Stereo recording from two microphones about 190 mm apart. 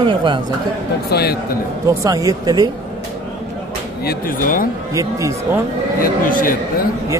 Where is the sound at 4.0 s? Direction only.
50° left (ahead or behind).